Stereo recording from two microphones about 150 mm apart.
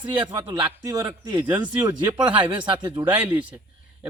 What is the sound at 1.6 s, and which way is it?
Speech, 30° right (ahead or behind).